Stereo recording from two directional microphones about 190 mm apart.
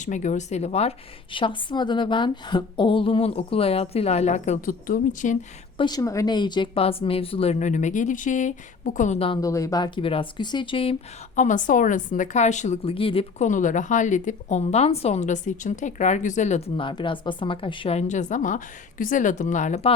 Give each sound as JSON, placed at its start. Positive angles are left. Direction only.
{"t": 0.0, "sound": "a woman's voice", "side_deg": 40}
{"t": 5.7, "sound": "a woman's voice", "side_deg": 20}
{"t": 9.4, "sound": "speech", "side_deg": 15}
{"t": 11.3, "sound": "a woman's voice", "side_deg": 40}
{"t": 13.5, "sound": "a woman's voice", "side_deg": 40}